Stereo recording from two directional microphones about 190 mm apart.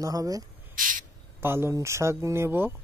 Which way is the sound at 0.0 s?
20° right (ahead or behind).